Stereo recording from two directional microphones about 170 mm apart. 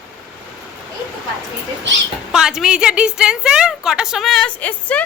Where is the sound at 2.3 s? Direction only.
5° right (ahead or behind).